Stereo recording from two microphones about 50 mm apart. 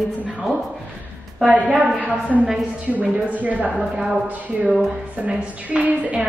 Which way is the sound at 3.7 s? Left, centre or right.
Centre.